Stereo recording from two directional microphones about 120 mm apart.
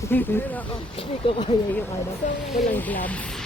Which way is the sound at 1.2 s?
45° left (ahead or behind).